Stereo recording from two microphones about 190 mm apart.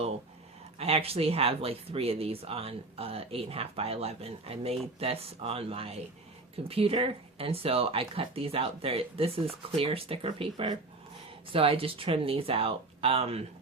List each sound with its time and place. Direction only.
0.8 s speech: 30° right (ahead or behind)